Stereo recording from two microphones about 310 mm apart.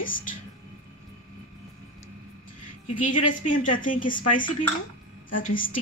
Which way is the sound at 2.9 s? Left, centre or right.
Left.